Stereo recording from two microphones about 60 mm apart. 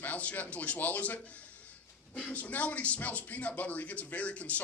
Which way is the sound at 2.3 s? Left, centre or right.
Left.